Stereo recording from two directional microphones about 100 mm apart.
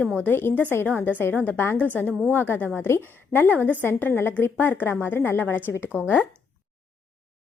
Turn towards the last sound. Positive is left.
turn(degrees=20)  # may be behind; listen again after turning